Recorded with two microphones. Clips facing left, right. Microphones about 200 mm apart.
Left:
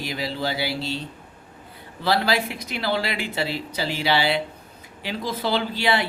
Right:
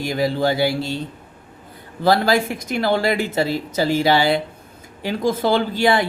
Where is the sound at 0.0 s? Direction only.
50° right (ahead or behind).